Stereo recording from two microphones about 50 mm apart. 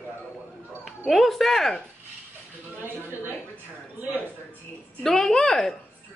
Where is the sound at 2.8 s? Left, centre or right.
Right.